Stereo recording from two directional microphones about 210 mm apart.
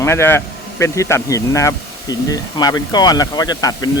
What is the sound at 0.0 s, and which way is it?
A man's voice, 10° left (ahead or behind).